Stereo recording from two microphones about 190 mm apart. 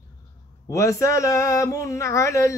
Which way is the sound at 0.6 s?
15° left (ahead or behind).